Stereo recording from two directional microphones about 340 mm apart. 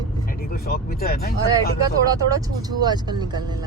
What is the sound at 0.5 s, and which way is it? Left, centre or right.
Speech, left.